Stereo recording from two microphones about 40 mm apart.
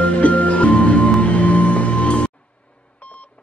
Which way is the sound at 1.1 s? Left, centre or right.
Left.